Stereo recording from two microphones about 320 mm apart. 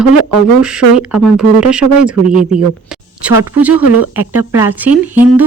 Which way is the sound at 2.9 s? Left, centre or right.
Centre.